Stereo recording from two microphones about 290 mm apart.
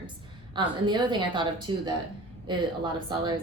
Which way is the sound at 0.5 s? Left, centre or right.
Centre.